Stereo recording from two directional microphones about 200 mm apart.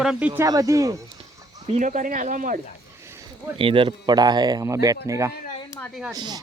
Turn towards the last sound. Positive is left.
turn(degrees=-20)  # may be behind; listen again after turning